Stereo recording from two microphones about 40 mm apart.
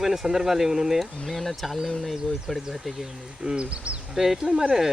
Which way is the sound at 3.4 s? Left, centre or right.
Right.